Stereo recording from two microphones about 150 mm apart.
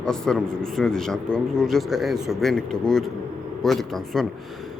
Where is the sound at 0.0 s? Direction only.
5° left (ahead or behind).